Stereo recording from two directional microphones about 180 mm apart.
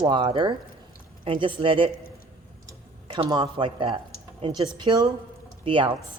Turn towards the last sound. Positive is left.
turn(degrees=-30)  # may be behind; listen again after turning